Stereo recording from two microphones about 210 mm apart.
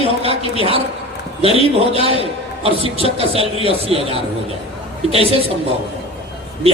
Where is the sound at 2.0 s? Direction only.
30° right (ahead or behind).